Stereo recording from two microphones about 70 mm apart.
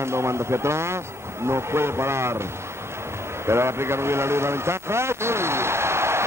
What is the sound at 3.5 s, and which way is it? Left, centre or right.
A man's voice, right.